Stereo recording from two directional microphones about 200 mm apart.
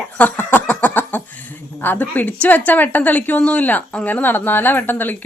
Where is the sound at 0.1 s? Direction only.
10° left (ahead or behind).